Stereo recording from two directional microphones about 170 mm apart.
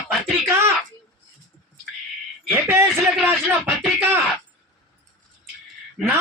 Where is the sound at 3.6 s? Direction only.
10° right (ahead or behind).